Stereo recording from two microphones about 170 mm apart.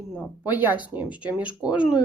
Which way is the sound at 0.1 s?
10° right (ahead or behind).